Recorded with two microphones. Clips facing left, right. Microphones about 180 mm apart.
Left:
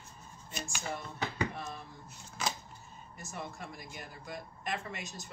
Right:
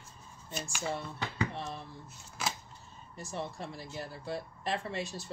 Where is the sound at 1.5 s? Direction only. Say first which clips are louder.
Right 2 dB; 30° right (ahead or behind).